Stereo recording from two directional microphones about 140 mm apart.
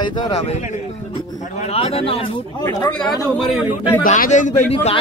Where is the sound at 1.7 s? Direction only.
45° left (ahead or behind).